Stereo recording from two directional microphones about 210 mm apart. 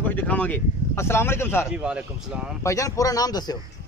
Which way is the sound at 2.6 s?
15° left (ahead or behind).